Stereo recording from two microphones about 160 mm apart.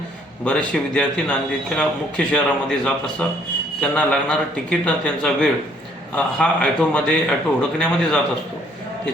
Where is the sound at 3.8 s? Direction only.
5° left (ahead or behind).